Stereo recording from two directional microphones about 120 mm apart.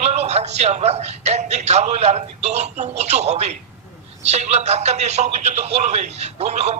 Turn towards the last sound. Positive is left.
turn(degrees=-65)  # may be behind; listen again after turning